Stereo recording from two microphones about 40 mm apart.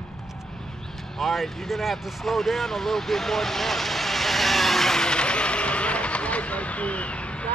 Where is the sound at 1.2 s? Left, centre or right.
Centre.